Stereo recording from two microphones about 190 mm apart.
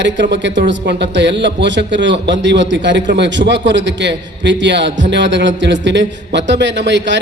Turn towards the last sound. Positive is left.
turn(degrees=-70)  # may be behind; listen again after turning